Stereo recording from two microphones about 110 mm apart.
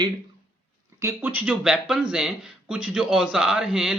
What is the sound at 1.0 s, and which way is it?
Speech, 25° right (ahead or behind).